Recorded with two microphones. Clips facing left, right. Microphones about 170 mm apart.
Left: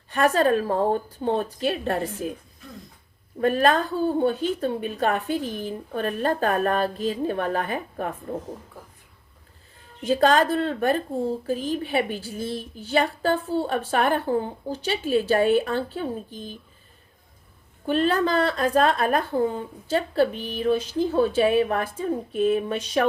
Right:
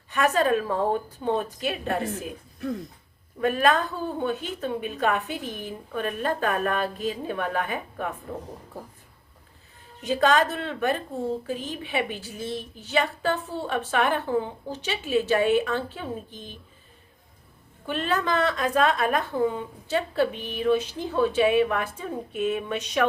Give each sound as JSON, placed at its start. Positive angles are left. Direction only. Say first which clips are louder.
{"t": 0.3, "sound": "a woman's voice", "louder": "left 2 dB", "side_deg": 45}
{"t": 3.4, "sound": "a woman's voice", "louder": "left 2 dB", "side_deg": 35}
{"t": 10.1, "sound": "a woman's voice", "louder": "left 3 dB", "side_deg": 35}
{"t": 17.8, "sound": "a woman's voice", "louder": "left 5 dB", "side_deg": 35}